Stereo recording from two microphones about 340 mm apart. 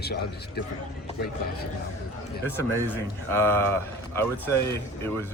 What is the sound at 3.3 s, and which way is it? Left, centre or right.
A man's voice, centre.